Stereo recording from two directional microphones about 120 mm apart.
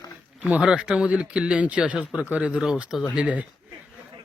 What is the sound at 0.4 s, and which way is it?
Speech, 10° right (ahead or behind).